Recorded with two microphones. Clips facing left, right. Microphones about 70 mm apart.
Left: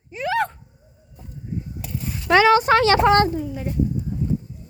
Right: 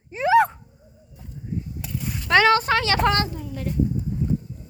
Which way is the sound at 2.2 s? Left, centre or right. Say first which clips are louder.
Left 2 dB; centre.